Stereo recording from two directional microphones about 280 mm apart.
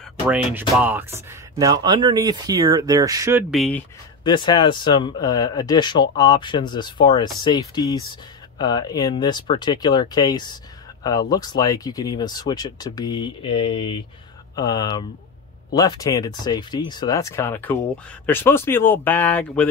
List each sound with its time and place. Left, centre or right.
0.3 s speech: centre
4.2 s speech: centre